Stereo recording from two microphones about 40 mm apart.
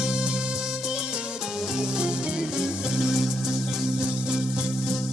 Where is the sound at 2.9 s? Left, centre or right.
Centre.